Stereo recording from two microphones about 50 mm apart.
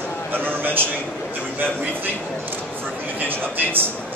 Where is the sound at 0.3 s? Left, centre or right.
Right.